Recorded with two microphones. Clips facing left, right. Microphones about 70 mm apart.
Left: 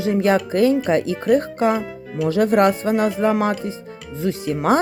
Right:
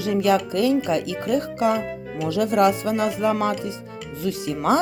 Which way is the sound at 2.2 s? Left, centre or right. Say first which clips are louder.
Left 3 dB; left.